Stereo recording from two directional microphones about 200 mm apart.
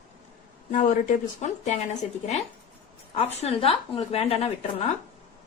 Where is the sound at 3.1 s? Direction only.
30° left (ahead or behind).